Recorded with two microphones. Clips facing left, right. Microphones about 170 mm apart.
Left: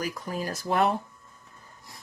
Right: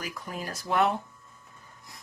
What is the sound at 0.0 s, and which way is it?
Speech, 35° left (ahead or behind).